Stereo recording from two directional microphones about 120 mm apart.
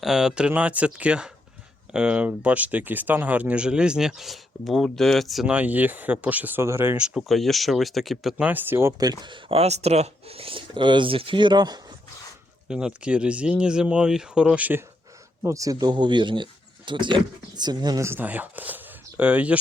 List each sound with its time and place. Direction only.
0.0 s speech: 5° right (ahead or behind)
7.0 s speech: 5° right (ahead or behind)
8.4 s speech: 15° right (ahead or behind)
9.0 s speech: 35° right (ahead or behind)
12.6 s speech: 5° right (ahead or behind)
15.4 s speech: 25° right (ahead or behind)
18.0 s speech: 15° right (ahead or behind)